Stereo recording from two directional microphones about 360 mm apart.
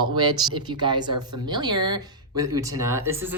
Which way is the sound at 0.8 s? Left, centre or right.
Centre.